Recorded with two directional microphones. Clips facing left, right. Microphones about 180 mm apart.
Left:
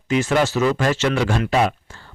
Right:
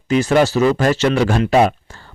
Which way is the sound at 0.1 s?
40° right (ahead or behind).